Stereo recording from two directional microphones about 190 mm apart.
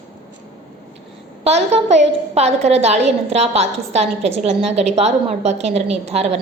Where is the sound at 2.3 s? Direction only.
35° right (ahead or behind).